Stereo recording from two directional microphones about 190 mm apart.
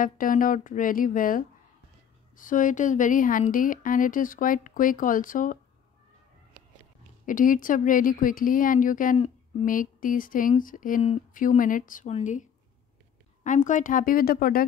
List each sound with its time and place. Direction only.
0.0 s speech: 45° left (ahead or behind)
7.2 s speech: 45° left (ahead or behind)